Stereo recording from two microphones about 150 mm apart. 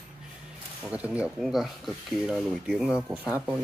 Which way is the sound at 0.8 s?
10° right (ahead or behind).